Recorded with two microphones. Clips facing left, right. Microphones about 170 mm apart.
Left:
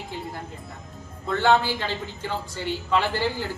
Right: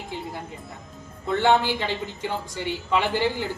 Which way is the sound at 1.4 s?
15° right (ahead or behind).